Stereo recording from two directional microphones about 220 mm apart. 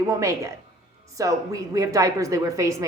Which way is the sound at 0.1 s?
15° right (ahead or behind).